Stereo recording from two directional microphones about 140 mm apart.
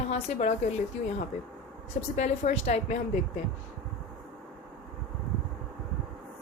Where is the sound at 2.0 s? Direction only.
55° left (ahead or behind).